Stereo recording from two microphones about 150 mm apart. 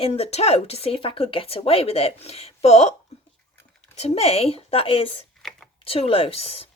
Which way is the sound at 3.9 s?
45° left (ahead or behind).